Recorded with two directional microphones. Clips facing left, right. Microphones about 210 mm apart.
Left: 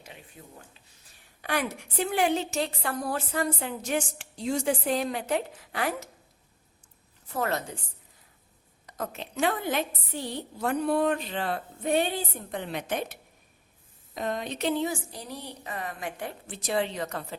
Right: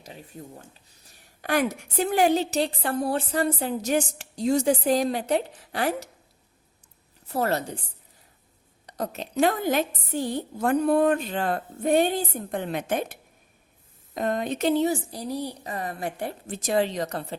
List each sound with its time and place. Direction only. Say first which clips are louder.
1.4 s a woman's voice: right 5 dB; 45° right (ahead or behind)
7.3 s a woman's voice: right 4 dB; 35° right (ahead or behind)
8.9 s a woman's voice: right 4 dB; 35° right (ahead or behind)